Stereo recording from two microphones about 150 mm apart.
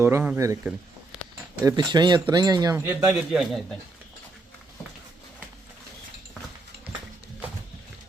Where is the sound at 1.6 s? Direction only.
25° right (ahead or behind).